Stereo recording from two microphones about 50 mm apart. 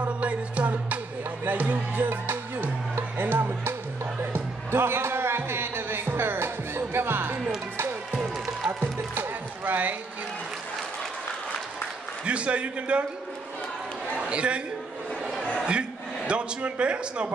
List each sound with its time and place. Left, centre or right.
0.0 s music: right
1.4 s speech: right
4.0 s music: right
8.1 s music: right
12.3 s a man's voice: right
14.2 s a man's voice: right
15.6 s a man's voice: right